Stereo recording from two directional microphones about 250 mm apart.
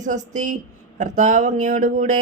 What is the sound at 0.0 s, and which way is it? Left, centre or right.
Speech, right.